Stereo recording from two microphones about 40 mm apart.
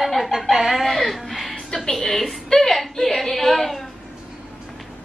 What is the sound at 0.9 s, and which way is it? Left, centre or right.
Music, centre.